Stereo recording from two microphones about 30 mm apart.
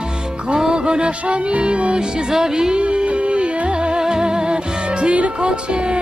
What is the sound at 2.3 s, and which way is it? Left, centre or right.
Music, right.